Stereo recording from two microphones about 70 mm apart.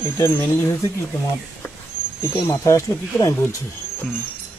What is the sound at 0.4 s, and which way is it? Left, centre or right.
Speech, left.